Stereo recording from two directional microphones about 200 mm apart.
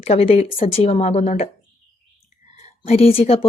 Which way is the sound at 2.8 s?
30° left (ahead or behind).